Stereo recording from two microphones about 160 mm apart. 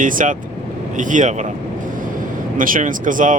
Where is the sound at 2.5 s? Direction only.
55° right (ahead or behind).